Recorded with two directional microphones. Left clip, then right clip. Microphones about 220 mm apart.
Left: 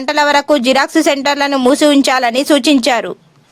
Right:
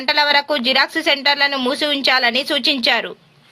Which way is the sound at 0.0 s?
60° left (ahead or behind).